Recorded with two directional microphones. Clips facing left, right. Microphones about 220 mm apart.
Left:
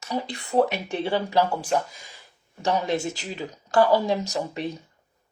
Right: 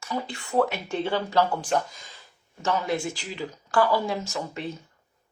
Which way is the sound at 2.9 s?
45° left (ahead or behind).